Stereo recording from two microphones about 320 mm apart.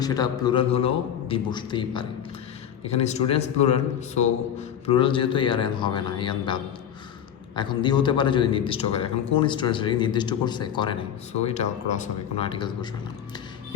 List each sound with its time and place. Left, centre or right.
0.0 s a man's voice: centre
4.9 s a man's voice: centre